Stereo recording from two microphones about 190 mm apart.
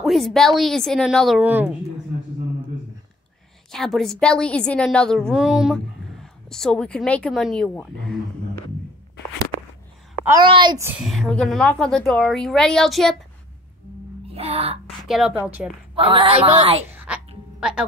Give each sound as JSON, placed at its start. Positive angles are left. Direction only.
{"t": 0.0, "sound": "a woman's voice", "side_deg": 0}
{"t": 3.7, "sound": "a woman's voice", "side_deg": 0}
{"t": 10.4, "sound": "a woman's voice", "side_deg": -25}
{"t": 10.9, "sound": "a woman's voice", "side_deg": 0}
{"t": 14.2, "sound": "music", "side_deg": -30}
{"t": 15.0, "sound": "a woman's voice", "side_deg": 0}
{"t": 15.9, "sound": "a woman's voice", "side_deg": -25}
{"t": 16.9, "sound": "throat clearing", "side_deg": -10}
{"t": 17.6, "sound": "speech", "side_deg": -5}